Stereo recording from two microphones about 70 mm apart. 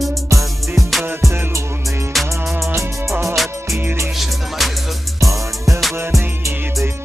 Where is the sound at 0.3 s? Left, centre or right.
Right.